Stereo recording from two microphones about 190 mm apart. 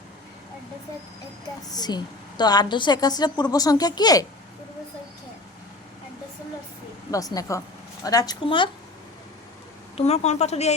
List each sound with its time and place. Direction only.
1.6 s a woman's voice: 20° left (ahead or behind)
7.3 s a woman's voice: 15° left (ahead or behind)
10.1 s a woman's voice: 35° left (ahead or behind)